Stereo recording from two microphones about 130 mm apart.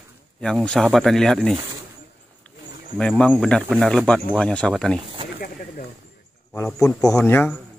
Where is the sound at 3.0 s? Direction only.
10° left (ahead or behind).